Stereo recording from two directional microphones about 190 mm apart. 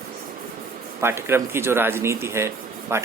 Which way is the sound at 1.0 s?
15° right (ahead or behind).